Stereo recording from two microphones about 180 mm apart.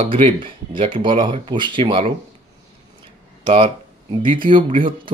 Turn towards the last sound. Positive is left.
turn(degrees=-30)  # may be behind; listen again after turning